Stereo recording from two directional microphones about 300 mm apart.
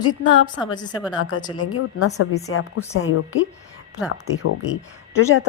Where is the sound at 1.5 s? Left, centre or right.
Left.